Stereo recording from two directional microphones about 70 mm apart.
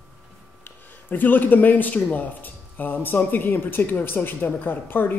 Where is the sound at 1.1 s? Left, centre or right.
Left.